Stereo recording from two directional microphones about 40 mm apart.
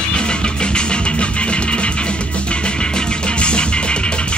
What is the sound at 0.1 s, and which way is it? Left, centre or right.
Music, left.